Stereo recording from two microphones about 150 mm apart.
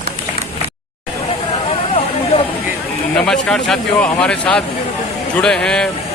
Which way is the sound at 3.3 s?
5° left (ahead or behind).